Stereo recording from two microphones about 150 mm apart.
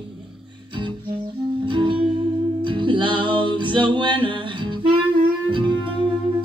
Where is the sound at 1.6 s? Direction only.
30° right (ahead or behind).